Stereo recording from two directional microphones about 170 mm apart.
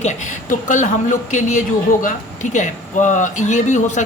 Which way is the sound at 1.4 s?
50° left (ahead or behind).